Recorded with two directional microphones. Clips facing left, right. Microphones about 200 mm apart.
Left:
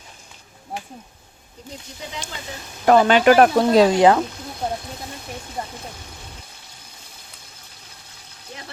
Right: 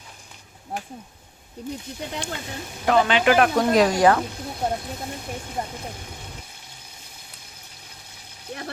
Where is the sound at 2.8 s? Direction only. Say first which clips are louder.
Left 5 dB; 45° left (ahead or behind); by 4.2 s 25° left (ahead or behind).